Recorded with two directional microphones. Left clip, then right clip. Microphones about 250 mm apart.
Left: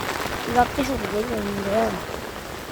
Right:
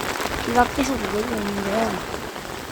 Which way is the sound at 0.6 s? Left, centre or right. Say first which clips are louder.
Right 1 dB; centre.